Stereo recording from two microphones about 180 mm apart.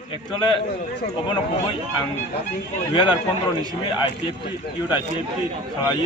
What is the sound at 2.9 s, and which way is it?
Speech, 25° left (ahead or behind).